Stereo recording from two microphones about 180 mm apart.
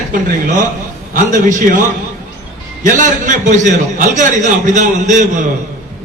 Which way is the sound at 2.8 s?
45° right (ahead or behind).